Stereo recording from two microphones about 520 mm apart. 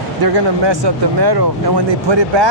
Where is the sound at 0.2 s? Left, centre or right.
Right.